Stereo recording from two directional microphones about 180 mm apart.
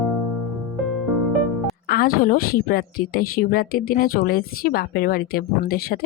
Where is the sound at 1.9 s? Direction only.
50° left (ahead or behind).